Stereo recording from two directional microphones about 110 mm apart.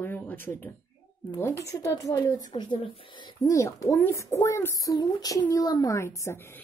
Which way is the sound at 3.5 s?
30° left (ahead or behind).